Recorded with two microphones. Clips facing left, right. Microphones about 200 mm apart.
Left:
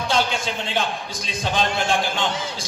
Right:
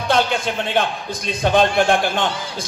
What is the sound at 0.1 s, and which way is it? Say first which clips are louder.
A man's voice: right 6 dB; 55° right (ahead or behind).